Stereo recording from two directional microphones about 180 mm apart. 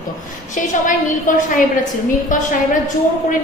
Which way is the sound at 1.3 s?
45° left (ahead or behind).